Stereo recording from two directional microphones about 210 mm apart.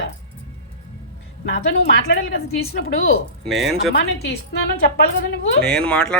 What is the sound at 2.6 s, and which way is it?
Speech, 45° left (ahead or behind).